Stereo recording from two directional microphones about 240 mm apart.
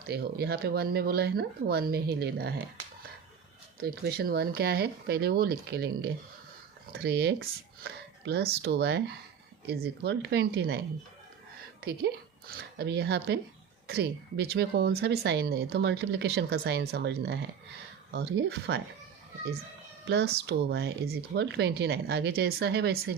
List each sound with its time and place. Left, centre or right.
0.0 s speech: right
3.8 s a woman's voice: right
11.8 s a woman's voice: right
20.1 s a woman's voice: right